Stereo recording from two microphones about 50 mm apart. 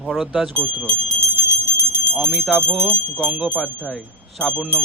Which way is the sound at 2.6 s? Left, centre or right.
Right.